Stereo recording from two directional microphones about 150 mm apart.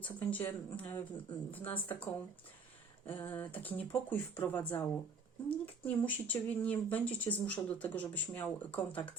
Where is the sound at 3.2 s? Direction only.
15° left (ahead or behind).